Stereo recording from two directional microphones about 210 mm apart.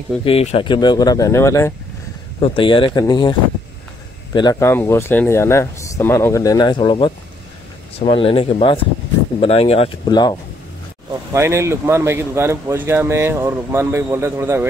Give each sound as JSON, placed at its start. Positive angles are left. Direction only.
{"t": 0.2, "sound": "speech", "side_deg": 30}
{"t": 2.4, "sound": "speech", "side_deg": 25}
{"t": 11.3, "sound": "speech", "side_deg": -15}